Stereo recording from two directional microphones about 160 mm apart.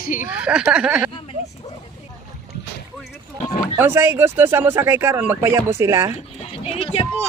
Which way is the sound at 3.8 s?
15° right (ahead or behind).